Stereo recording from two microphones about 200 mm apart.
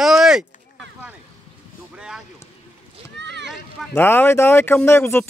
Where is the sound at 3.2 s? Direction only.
60° right (ahead or behind).